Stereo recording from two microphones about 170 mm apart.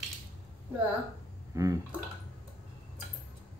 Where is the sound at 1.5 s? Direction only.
20° right (ahead or behind).